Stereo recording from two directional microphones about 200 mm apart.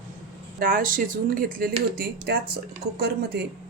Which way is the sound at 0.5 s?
45° right (ahead or behind).